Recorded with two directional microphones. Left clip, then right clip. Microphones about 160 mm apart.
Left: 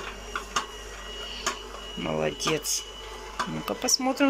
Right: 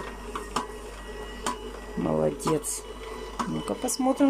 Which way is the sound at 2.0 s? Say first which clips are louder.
Right 3 dB; 15° right (ahead or behind).